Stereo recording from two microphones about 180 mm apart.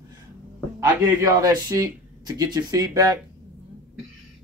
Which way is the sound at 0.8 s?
20° right (ahead or behind).